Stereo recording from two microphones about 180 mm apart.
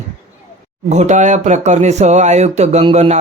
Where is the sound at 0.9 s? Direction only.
40° right (ahead or behind).